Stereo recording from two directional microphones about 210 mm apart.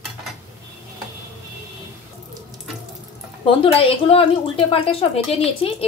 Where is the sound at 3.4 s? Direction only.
25° left (ahead or behind).